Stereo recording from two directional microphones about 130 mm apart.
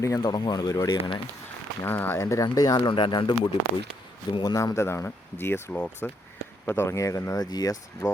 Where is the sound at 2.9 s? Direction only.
40° left (ahead or behind).